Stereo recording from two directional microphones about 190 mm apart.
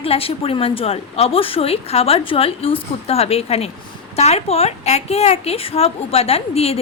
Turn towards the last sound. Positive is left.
turn(degrees=30)  # may be behind; listen again after turning